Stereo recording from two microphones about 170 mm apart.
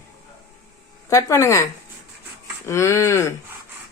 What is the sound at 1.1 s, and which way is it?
Speech, 15° left (ahead or behind).